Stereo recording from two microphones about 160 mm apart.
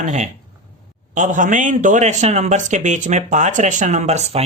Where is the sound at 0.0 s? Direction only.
50° right (ahead or behind).